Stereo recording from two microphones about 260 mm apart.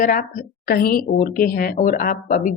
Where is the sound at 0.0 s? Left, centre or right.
Left.